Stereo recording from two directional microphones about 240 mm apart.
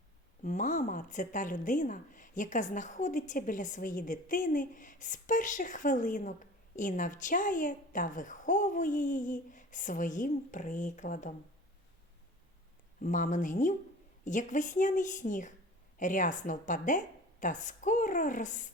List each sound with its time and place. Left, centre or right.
0.4 s speech: left
13.0 s a woman's voice: left